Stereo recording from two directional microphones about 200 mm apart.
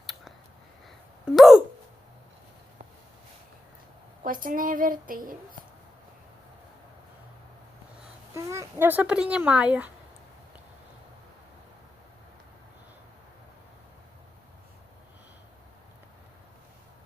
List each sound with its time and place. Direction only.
0.0 s a sound: centre (ahead or behind)
4.2 s a woman's voice: 45° right (ahead or behind)
8.3 s speech: 15° right (ahead or behind)